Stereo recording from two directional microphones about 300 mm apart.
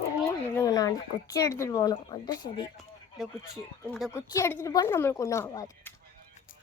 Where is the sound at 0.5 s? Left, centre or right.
Centre.